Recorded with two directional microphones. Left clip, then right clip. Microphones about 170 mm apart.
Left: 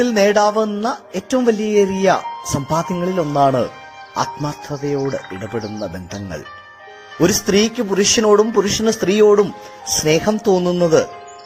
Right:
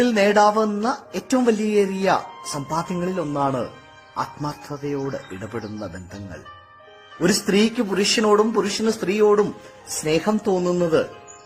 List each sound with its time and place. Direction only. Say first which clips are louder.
0.0 s speech: left 2 dB; 25° left (ahead or behind)
7.2 s speech: left 5 dB; 20° left (ahead or behind)